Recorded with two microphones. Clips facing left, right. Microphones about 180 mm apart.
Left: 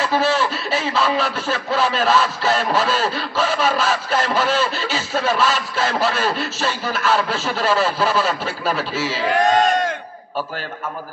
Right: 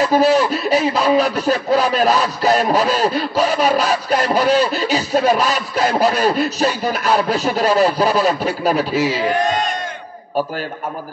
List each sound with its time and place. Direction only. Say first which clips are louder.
0.0 s speech: right 5 dB; 40° right (ahead or behind)